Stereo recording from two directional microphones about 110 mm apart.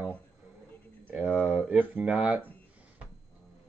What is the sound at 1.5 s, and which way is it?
Speech, 15° right (ahead or behind).